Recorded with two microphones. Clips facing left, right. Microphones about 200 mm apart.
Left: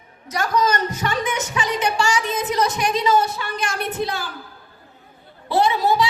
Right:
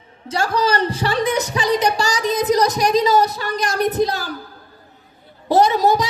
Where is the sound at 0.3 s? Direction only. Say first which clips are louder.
Right 1 dB; 30° right (ahead or behind).